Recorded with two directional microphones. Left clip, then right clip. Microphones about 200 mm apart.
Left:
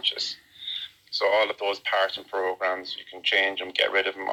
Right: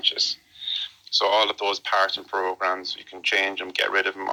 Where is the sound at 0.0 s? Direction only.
35° right (ahead or behind).